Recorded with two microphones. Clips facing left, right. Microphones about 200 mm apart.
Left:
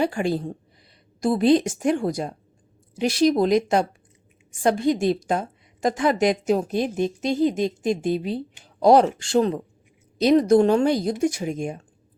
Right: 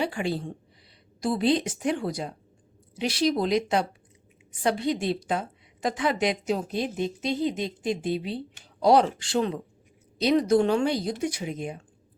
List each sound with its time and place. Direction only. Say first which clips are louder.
0.0 s a woman's voice: left 5 dB; 45° left (ahead or behind)